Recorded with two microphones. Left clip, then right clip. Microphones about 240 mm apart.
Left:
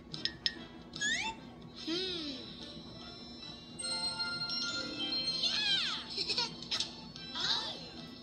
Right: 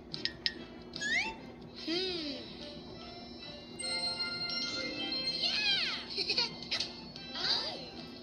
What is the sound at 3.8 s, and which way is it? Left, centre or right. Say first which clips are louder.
Music: right 1 dB; centre.